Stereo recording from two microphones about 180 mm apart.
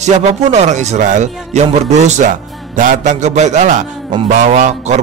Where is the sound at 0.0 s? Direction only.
40° right (ahead or behind).